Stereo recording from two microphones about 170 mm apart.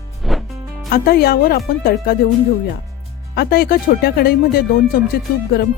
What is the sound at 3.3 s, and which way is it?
Speech, 65° left (ahead or behind).